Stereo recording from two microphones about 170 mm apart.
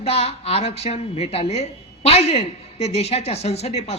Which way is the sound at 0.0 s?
35° left (ahead or behind).